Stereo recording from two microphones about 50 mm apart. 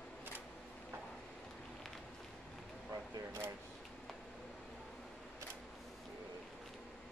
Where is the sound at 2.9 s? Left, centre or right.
Right.